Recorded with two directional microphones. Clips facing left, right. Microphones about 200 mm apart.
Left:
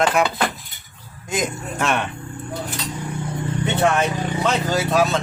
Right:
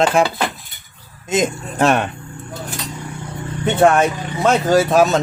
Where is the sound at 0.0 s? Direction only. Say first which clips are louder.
Right 3 dB; 30° right (ahead or behind).